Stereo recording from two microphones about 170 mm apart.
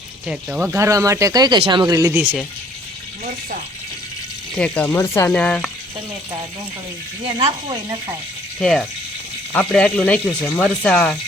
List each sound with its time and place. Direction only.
0.3 s speech: 5° right (ahead or behind)
4.5 s speech: 5° left (ahead or behind)
7.3 s speech: 30° right (ahead or behind)
9.5 s speech: 5° left (ahead or behind)